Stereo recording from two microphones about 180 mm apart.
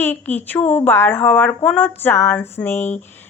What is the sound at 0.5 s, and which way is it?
A woman's voice, 10° left (ahead or behind).